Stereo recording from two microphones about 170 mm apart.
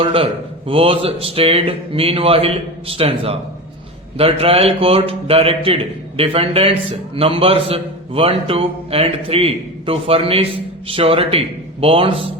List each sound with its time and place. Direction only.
0.0 s a man's voice: 35° right (ahead or behind)